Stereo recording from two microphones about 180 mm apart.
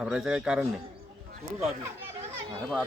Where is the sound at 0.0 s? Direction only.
5° right (ahead or behind).